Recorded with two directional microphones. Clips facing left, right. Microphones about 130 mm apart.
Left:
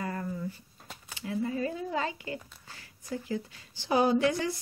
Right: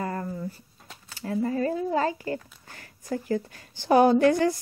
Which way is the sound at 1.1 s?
45° right (ahead or behind).